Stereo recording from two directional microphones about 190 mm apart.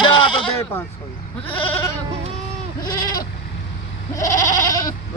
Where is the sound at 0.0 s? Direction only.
25° left (ahead or behind).